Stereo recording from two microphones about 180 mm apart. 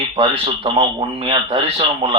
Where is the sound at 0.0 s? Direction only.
25° right (ahead or behind).